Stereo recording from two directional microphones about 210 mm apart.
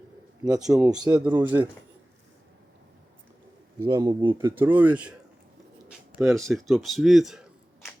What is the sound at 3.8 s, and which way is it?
Speech, 20° right (ahead or behind).